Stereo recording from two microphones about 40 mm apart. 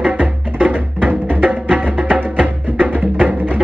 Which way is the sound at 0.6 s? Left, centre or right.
Right.